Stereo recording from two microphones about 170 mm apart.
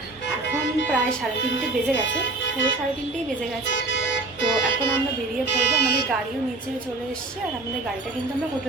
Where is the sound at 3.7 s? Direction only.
90° left.